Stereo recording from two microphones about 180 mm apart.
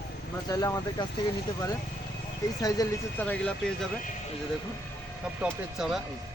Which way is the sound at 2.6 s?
20° left (ahead or behind).